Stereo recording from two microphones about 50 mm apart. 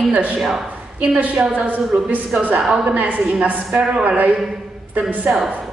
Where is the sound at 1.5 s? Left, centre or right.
Right.